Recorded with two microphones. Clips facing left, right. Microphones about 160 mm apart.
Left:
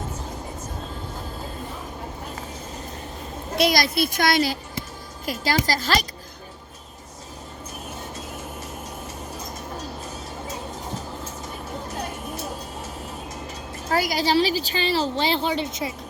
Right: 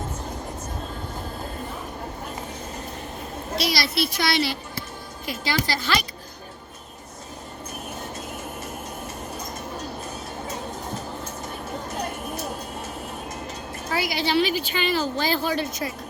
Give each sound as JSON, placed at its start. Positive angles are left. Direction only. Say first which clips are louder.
{"t": 3.5, "sound": "a woman's voice", "louder": "left 5 dB", "side_deg": 50}
{"t": 13.9, "sound": "a woman's voice", "louder": "left 2 dB", "side_deg": 45}